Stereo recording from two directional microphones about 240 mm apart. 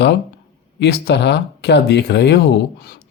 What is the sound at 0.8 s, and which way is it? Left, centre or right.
Speech, left.